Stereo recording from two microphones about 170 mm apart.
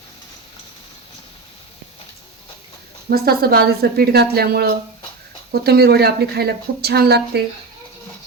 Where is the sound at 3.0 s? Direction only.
65° right (ahead or behind).